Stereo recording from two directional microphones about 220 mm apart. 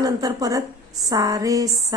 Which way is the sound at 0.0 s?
15° right (ahead or behind).